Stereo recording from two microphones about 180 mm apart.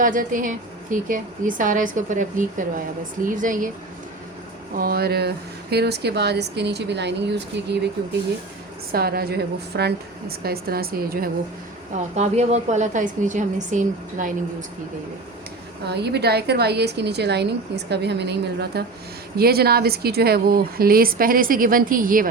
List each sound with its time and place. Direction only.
0.0 s a woman's voice: 50° right (ahead or behind)
4.8 s a woman's voice: 55° right (ahead or behind); by 7.8 s 75° right (ahead or behind)
8.9 s a woman's voice: 55° right (ahead or behind)
11.9 s a woman's voice: 40° right (ahead or behind)
15.9 s a woman's voice: 65° right (ahead or behind); by 22.3 s 50° right (ahead or behind)